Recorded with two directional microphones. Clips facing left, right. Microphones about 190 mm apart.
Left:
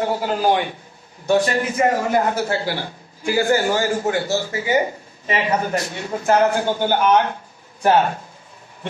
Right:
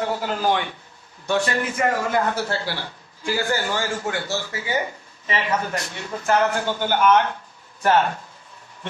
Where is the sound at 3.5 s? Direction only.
40° left (ahead or behind).